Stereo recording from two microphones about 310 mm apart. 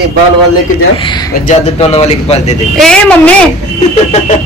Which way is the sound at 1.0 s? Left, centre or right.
Centre.